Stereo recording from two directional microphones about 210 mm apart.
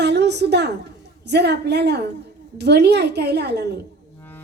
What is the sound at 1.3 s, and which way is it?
A woman's voice, 55° right (ahead or behind).